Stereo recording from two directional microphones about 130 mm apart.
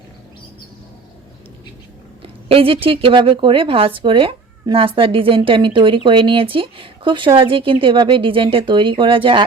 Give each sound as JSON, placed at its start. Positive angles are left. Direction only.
{"t": 2.2, "sound": "a woman's voice", "side_deg": -45}